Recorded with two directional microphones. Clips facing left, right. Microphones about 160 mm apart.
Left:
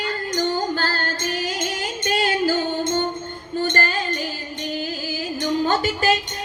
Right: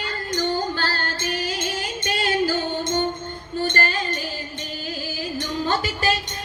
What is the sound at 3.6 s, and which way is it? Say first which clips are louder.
Music: left 1 dB; 45° left (ahead or behind).